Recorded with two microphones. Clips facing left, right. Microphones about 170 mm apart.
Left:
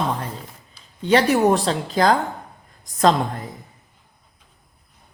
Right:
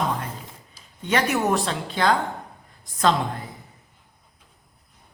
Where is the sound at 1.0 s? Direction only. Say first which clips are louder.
Left 6 dB; 30° left (ahead or behind).